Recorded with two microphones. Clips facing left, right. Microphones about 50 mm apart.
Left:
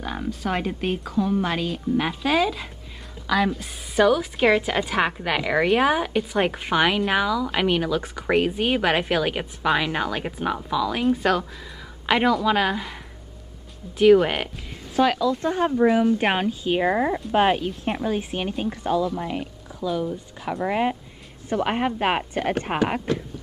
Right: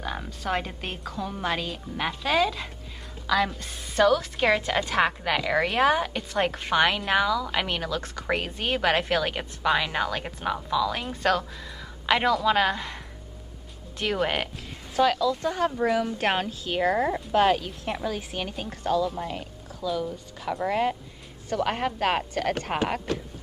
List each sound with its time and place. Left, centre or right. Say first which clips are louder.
0.0 s a woman's voice: left 4 dB; centre
15.4 s speech: left 3 dB; left
15.7 s a woman's voice: left 6 dB; centre
16.0 s speech: left 5 dB; centre
19.2 s a sound: left 4 dB; centre
20.0 s a woman's voice: left 4 dB; centre